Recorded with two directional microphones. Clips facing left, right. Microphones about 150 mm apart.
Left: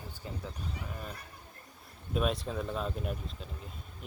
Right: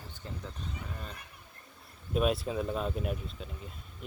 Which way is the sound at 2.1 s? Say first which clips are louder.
Right 3 dB; 5° right (ahead or behind).